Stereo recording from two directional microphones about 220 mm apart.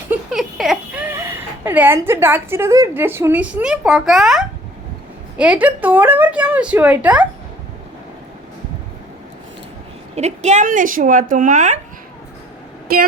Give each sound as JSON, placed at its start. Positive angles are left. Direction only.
{"t": 0.1, "sound": "a woman's voice", "side_deg": 0}
{"t": 10.2, "sound": "a woman's voice", "side_deg": -30}
{"t": 12.9, "sound": "speech", "side_deg": -45}